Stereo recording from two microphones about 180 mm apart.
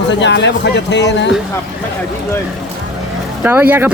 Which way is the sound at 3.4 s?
10° right (ahead or behind).